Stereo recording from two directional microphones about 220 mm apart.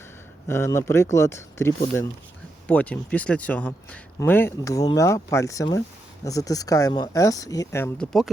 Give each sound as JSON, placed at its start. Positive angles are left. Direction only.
{"t": 0.4, "sound": "speech", "side_deg": 10}